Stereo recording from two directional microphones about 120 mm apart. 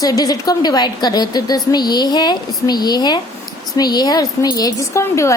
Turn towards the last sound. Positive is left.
turn(degrees=25)  # may be behind; listen again after turning